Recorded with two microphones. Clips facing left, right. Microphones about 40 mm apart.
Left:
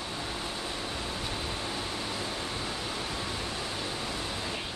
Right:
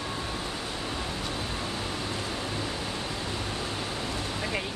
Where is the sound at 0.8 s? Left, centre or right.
Right.